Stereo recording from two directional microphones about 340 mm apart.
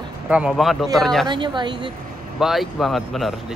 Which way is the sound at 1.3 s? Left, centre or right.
Centre.